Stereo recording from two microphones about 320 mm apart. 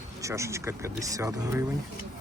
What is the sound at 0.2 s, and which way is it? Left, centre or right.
Speech, centre.